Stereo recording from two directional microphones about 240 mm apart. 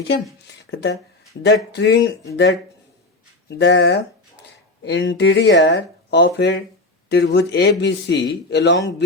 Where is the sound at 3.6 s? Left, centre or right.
Left.